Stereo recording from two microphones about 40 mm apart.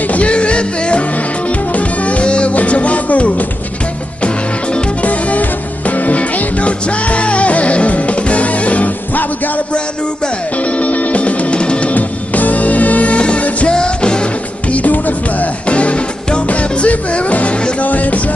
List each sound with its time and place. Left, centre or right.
0.1 s music: left
5.0 s music: left
10.6 s music: left
11.9 s music: left
14.7 s music: left
15.6 s music: left